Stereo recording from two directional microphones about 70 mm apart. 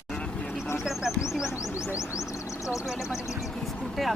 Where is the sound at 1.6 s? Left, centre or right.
Left.